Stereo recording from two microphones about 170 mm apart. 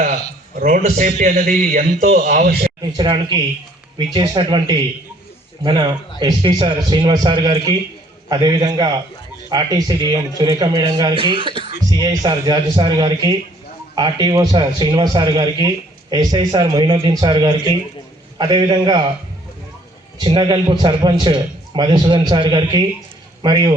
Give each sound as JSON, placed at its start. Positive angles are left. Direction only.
{"t": 0.6, "sound": "a man's voice", "side_deg": -45}
{"t": 2.8, "sound": "a man's voice", "side_deg": -25}
{"t": 20.2, "sound": "a man's voice", "side_deg": -25}